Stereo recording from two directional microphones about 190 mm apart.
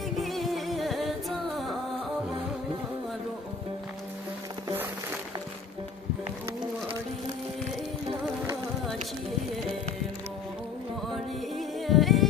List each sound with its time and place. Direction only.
0.2 s music: centre (ahead or behind)
11.5 s music: centre (ahead or behind)